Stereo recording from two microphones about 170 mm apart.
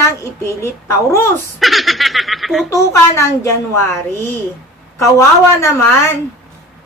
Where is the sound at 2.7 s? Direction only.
20° left (ahead or behind).